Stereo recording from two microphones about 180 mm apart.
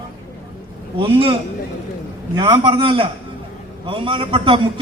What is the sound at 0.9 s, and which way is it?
A man's voice, 30° right (ahead or behind).